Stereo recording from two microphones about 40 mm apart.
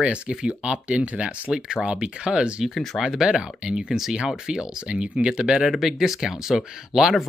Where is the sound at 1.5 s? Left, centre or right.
Centre.